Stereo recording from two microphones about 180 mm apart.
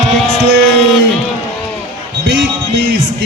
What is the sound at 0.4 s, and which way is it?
Music, 80° right.